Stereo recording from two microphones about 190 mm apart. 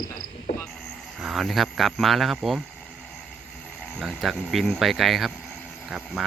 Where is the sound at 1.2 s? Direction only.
Centre (ahead or behind).